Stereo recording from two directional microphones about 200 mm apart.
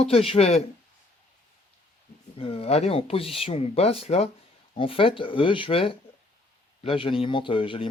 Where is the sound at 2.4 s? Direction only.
30° left (ahead or behind).